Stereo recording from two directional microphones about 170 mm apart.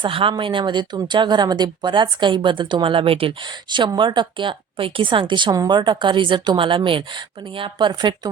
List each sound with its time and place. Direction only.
0.0 s speech: 30° right (ahead or behind)